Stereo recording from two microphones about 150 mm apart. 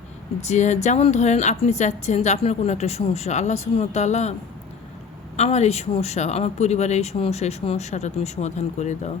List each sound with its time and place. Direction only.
0.4 s a woman's voice: 50° left (ahead or behind)
5.4 s a woman's voice: 45° left (ahead or behind)